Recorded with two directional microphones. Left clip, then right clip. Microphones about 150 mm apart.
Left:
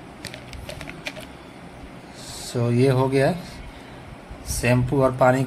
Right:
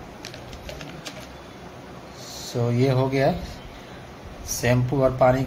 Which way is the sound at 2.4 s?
20° left (ahead or behind).